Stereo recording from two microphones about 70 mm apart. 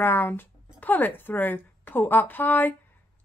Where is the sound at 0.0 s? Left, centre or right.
Left.